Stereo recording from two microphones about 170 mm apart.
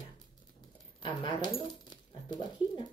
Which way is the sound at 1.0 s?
30° left (ahead or behind).